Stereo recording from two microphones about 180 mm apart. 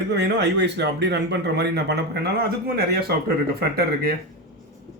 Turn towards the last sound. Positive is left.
turn(degrees=-60)  # may be behind; listen again after turning